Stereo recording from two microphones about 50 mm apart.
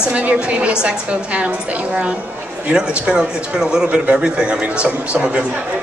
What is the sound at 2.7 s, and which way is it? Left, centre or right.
A man's voice, centre.